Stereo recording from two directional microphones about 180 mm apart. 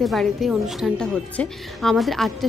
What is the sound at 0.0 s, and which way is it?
A woman's voice, centre (ahead or behind).